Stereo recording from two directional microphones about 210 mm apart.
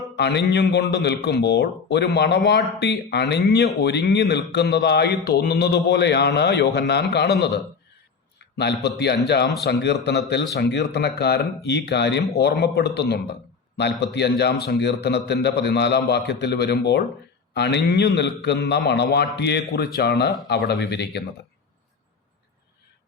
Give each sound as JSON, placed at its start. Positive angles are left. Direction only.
{"t": 0.2, "sound": "a man's voice", "side_deg": 55}
{"t": 8.5, "sound": "a man's voice", "side_deg": 55}